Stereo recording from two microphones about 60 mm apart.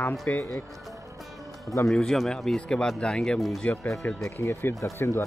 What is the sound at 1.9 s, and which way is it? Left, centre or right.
Speech, centre.